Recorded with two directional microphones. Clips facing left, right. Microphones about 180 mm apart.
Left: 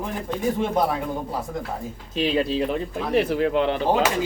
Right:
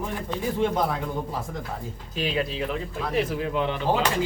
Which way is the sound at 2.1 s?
30° left (ahead or behind).